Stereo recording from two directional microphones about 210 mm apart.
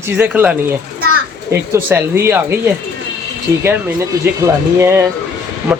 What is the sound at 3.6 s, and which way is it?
Speech, 10° right (ahead or behind).